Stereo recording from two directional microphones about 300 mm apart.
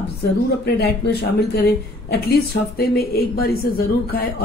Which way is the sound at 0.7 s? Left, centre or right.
Left.